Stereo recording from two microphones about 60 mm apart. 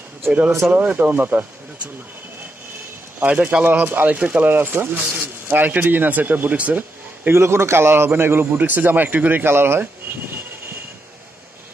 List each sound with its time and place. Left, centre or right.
0.7 s a man's voice: right
3.2 s speech: right
7.2 s a man's voice: right